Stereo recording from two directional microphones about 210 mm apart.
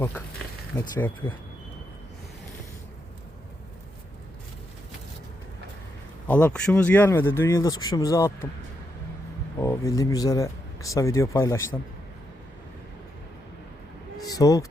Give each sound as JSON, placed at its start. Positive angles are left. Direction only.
{"t": 0.8, "sound": "speech", "side_deg": 10}
{"t": 6.2, "sound": "speech", "side_deg": 5}
{"t": 9.6, "sound": "speech", "side_deg": 15}
{"t": 14.3, "sound": "a sound", "side_deg": 15}